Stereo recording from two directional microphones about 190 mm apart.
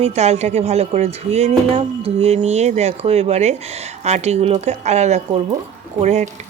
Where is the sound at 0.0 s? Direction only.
35° right (ahead or behind).